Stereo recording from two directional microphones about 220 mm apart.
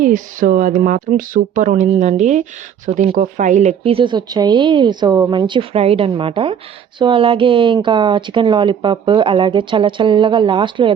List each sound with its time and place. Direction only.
0.0 s speech: 35° right (ahead or behind)